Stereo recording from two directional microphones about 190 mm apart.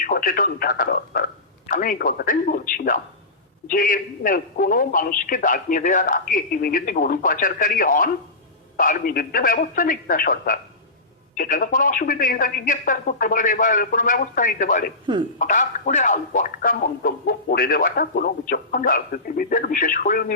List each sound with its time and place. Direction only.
0.0 s speech: 50° left (ahead or behind)